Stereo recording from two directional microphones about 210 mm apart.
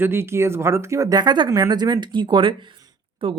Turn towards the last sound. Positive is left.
turn(degrees=-25)  # may be behind; listen again after turning